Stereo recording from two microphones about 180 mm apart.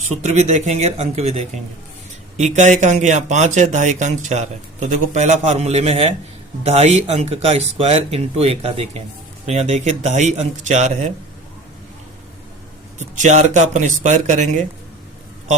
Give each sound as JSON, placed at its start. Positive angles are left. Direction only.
{"t": 0.2, "sound": "speech", "side_deg": -35}
{"t": 13.0, "sound": "speech", "side_deg": -40}